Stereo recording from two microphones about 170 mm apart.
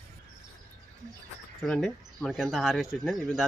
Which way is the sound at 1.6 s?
5° left (ahead or behind).